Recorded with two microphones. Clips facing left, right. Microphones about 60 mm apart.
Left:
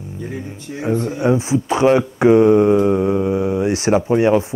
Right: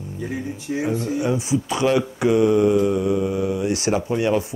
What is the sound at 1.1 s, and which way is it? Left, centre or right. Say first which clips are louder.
Speech: left 5 dB; left.